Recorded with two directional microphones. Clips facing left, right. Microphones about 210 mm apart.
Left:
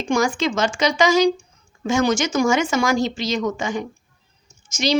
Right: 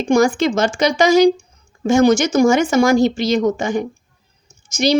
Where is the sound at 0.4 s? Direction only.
60° right (ahead or behind).